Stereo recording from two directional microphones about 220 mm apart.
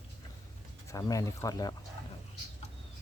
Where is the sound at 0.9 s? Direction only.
15° left (ahead or behind).